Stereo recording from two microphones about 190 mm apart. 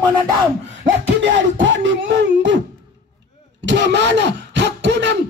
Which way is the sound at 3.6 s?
65° right (ahead or behind).